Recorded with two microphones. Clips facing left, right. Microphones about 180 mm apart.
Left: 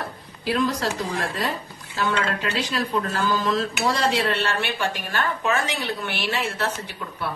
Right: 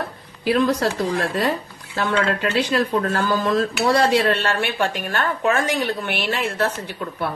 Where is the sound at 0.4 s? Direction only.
60° right (ahead or behind).